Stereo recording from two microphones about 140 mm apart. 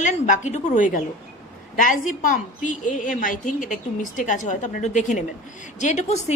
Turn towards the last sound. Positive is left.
turn(degrees=55)  # may be behind; listen again after turning